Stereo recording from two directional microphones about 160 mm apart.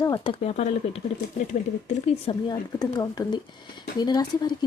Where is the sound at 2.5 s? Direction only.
25° left (ahead or behind).